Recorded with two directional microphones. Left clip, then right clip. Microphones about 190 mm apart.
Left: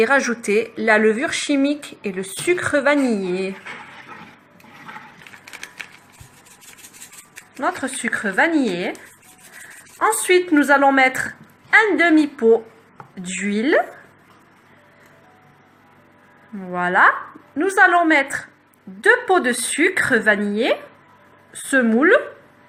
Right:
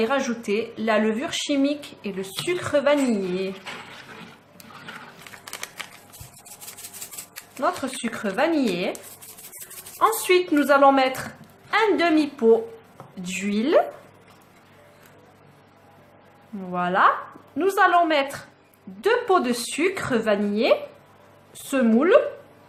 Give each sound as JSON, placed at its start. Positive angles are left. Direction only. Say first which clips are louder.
{"t": 0.3, "sound": "speech", "louder": "left 6 dB", "side_deg": 20}
{"t": 7.6, "sound": "speech", "louder": "left 3 dB", "side_deg": 10}
{"t": 10.0, "sound": "a woman's voice", "louder": "left 3 dB", "side_deg": 5}
{"t": 16.7, "sound": "speech", "louder": "left 4 dB", "side_deg": 10}